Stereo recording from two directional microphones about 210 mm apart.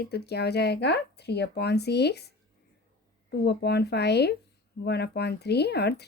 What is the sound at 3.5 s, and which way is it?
A woman's voice, 50° left (ahead or behind).